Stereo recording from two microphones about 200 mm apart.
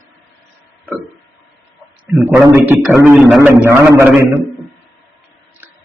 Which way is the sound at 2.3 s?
10° right (ahead or behind).